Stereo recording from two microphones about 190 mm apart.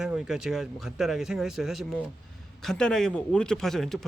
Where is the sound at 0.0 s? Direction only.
Centre (ahead or behind).